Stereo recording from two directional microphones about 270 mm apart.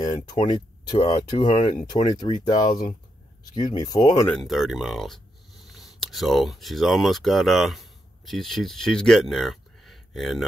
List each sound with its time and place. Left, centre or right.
0.0 s speech: centre
4.4 s speech: centre